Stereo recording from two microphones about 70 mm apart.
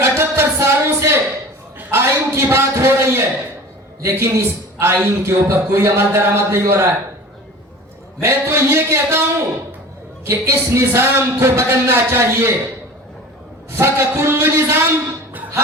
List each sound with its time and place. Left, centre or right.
0.0 s music: right
1.9 s a sound: right
4.0 s a man's voice: right
8.2 s speech: right
10.2 s speech: right
13.7 s speech: right
15.3 s a sound: right